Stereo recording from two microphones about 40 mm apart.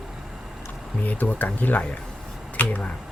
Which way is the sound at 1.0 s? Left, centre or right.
Left.